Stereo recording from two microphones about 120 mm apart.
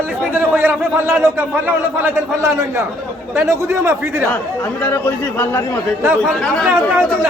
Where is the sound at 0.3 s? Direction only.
15° right (ahead or behind).